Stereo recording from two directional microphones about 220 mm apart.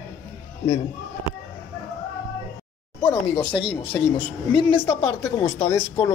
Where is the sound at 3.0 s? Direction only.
10° left (ahead or behind).